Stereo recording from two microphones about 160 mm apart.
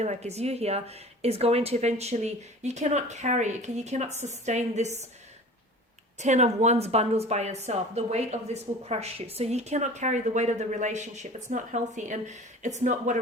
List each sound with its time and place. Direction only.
0.0 s speech: 45° right (ahead or behind)
6.1 s speech: 45° right (ahead or behind)